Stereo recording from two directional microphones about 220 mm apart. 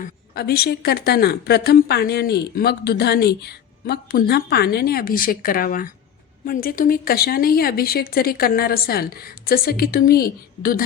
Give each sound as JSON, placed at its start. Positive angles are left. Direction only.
{"t": 0.0, "sound": "a woman's voice", "side_deg": 45}